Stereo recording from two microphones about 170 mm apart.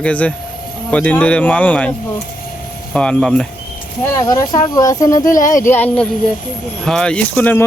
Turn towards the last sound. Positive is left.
turn(degrees=10)  # may be behind; listen again after turning